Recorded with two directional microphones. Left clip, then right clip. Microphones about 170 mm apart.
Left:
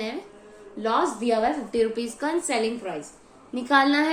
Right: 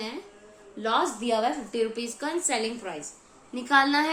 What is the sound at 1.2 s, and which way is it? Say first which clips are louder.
Speech: left 3 dB; 20° right (ahead or behind).